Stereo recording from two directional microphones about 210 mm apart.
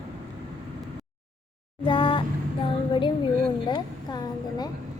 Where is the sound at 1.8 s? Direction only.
25° left (ahead or behind).